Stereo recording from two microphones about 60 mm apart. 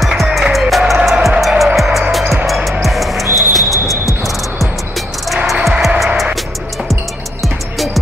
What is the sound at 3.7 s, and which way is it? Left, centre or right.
Music, left.